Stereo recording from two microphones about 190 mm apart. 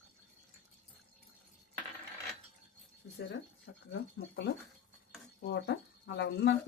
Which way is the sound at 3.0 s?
85° left.